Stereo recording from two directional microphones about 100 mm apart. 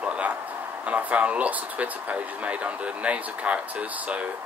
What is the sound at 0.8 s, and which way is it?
Speech, 15° right (ahead or behind).